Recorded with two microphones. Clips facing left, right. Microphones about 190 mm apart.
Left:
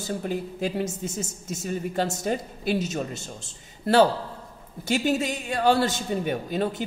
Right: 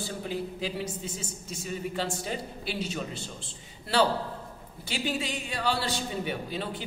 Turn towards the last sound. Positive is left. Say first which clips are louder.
# left 7 dB
turn(degrees=45)  # may be behind; listen again after turning